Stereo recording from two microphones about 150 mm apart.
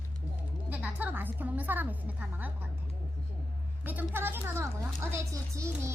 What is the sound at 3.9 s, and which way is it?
A woman's voice, 15° right (ahead or behind).